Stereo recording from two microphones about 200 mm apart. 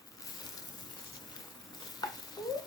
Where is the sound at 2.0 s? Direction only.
20° left (ahead or behind).